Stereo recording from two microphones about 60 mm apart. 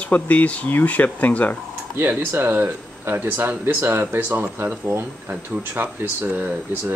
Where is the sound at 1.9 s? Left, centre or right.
Right.